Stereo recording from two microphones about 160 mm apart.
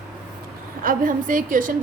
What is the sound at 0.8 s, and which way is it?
Speech, 60° right (ahead or behind).